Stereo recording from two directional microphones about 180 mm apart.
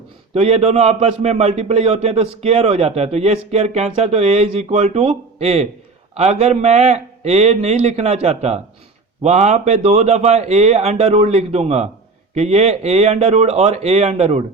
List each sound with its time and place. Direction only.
0.3 s a man's voice: 35° right (ahead or behind)